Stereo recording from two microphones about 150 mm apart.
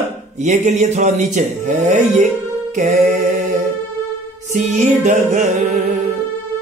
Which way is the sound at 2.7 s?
55° right (ahead or behind).